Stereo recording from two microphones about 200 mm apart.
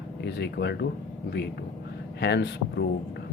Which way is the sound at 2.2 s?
55° left (ahead or behind).